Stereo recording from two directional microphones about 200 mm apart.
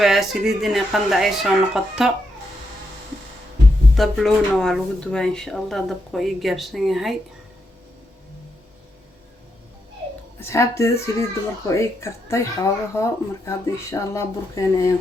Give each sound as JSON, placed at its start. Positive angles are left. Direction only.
{"t": 0.0, "sound": "speech", "side_deg": 0}
{"t": 3.9, "sound": "speech", "side_deg": 0}
{"t": 10.5, "sound": "speech", "side_deg": 15}